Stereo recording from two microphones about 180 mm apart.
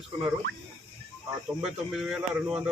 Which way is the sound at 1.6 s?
5° right (ahead or behind).